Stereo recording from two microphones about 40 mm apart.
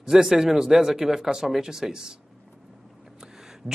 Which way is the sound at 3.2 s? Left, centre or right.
Centre.